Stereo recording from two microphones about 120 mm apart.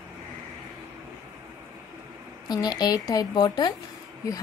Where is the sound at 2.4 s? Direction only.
35° left (ahead or behind).